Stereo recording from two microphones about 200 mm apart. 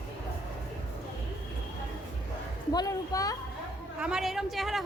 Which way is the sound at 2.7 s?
20° left (ahead or behind).